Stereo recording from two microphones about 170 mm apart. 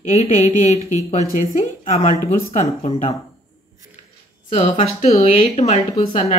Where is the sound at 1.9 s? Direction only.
40° left (ahead or behind).